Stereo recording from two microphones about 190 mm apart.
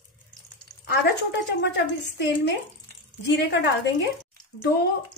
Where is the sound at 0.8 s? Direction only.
60° left (ahead or behind).